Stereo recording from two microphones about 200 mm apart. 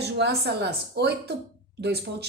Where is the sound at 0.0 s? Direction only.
55° right (ahead or behind).